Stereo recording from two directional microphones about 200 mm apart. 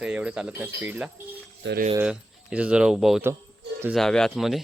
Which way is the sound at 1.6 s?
55° right (ahead or behind).